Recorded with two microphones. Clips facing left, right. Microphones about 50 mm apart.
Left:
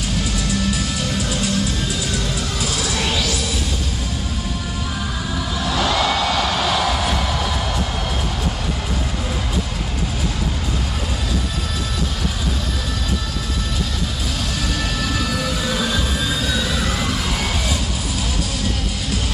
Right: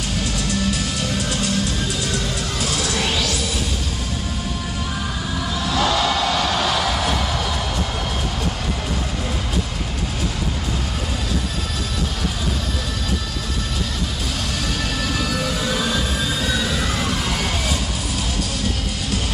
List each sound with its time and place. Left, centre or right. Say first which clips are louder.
5.8 s music: even; centre